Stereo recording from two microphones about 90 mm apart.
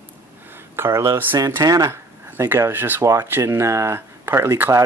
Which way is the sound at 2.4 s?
30° right (ahead or behind).